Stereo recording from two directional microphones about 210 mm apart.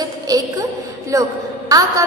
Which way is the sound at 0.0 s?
15° right (ahead or behind).